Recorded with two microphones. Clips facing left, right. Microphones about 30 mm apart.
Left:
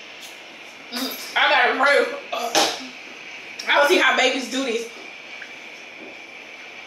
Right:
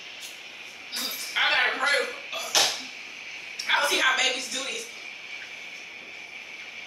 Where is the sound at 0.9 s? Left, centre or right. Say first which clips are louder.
Left 6 dB; left.